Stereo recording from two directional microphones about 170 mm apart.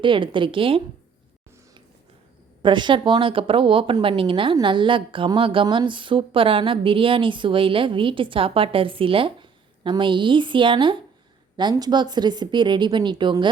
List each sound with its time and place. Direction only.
0.0 s speech: 30° right (ahead or behind)
2.6 s speech: 30° right (ahead or behind)